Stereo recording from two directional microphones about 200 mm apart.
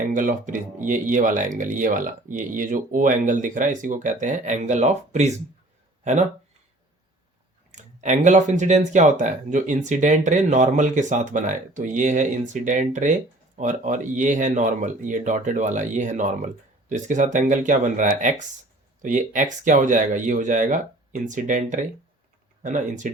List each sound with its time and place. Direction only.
0.1 s speech: 40° right (ahead or behind)
7.7 s speech: 35° right (ahead or behind)